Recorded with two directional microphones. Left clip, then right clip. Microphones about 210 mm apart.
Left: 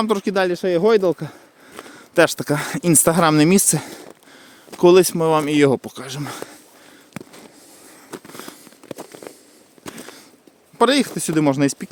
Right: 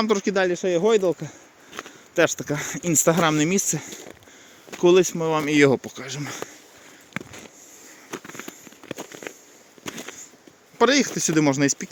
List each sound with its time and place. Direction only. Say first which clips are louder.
0.0 s speech: left 2 dB; 25° left (ahead or behind)
5.5 s speech: left 2 dB; 20° left (ahead or behind)
5.9 s speech: left 2 dB; 30° left (ahead or behind)
7.1 s walk: right 3 dB; centre (ahead or behind)
8.9 s a sound: even; centre (ahead or behind)
10.8 s speech: left 2 dB; 20° left (ahead or behind)